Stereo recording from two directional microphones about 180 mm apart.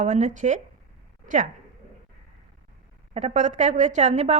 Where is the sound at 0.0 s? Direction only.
40° right (ahead or behind).